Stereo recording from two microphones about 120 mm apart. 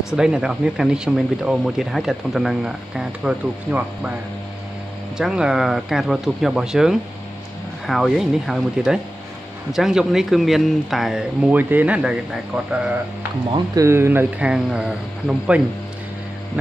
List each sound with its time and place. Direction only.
0.1 s speech: 5° right (ahead or behind)
5.1 s speech: 5° right (ahead or behind)
13.7 s speech: 20° right (ahead or behind)
14.5 s speech: 10° right (ahead or behind)